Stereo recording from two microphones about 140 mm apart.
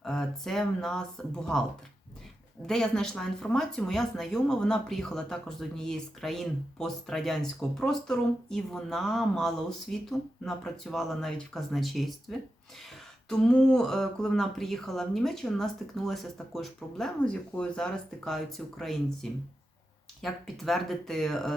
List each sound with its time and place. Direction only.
0.0 s speech: 5° left (ahead or behind)
2.6 s speech: 5° left (ahead or behind)